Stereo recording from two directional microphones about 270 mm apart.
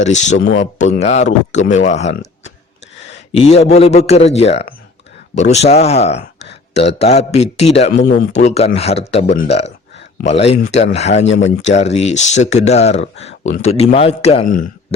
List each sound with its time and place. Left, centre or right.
0.0 s speech: left
0.3 s speech: left
0.6 s speech: left
9.9 s a sound: left
10.2 s speech: left
11.4 s speech: left
11.7 s speech: left